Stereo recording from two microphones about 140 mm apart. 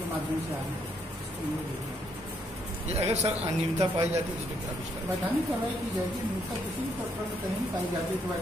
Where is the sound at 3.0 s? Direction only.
50° right (ahead or behind).